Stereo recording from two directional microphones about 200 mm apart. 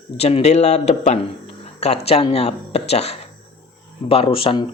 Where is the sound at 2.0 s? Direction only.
30° left (ahead or behind).